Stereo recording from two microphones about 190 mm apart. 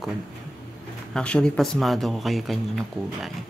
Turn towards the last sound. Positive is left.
turn(degrees=0)  # may be behind; listen again after turning